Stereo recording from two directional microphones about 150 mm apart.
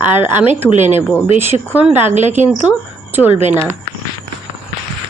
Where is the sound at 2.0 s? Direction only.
50° right (ahead or behind).